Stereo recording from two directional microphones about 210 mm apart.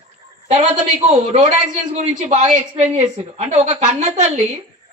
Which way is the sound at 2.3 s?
30° right (ahead or behind).